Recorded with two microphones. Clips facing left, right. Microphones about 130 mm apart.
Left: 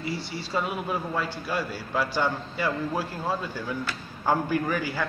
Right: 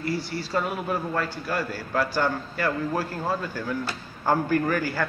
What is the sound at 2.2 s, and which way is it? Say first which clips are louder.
Speech: right 1 dB; 15° left (ahead or behind).